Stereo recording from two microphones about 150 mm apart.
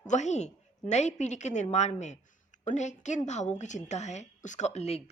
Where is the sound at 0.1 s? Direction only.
50° left (ahead or behind).